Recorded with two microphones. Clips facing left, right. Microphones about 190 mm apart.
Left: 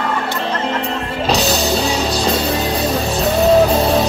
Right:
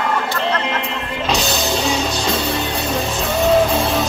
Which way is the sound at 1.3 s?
35° left (ahead or behind).